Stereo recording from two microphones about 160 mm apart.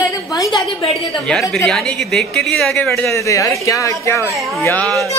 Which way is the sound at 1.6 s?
Centre (ahead or behind).